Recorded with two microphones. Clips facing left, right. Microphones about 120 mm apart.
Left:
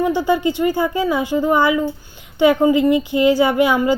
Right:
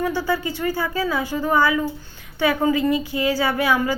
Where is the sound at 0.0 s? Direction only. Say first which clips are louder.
Left 6 dB; 20° left (ahead or behind).